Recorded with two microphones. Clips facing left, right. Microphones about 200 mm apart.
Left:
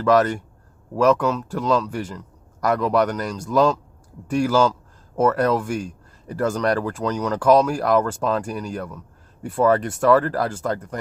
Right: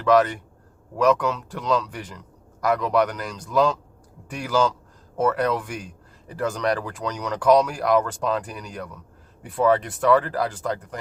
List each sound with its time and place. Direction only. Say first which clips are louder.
0.1 s speech: left 1 dB; 40° left (ahead or behind)